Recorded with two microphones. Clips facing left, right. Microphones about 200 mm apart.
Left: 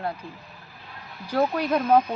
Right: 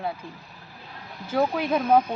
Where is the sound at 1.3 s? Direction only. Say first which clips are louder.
Even; centre (ahead or behind).